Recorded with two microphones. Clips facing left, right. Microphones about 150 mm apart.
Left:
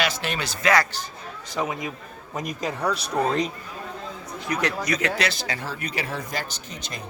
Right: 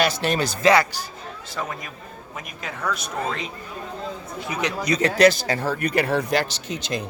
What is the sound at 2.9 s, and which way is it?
Speech, 35° left (ahead or behind).